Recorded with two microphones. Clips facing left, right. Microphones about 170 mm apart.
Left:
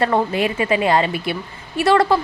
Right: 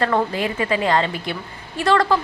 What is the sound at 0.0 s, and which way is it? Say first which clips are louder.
A woman's voice: left 2 dB; 20° left (ahead or behind).